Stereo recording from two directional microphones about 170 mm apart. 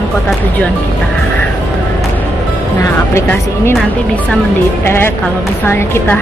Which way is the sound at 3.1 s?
15° left (ahead or behind).